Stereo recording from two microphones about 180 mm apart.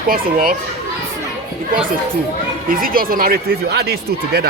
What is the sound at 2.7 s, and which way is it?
Speech, 50° right (ahead or behind).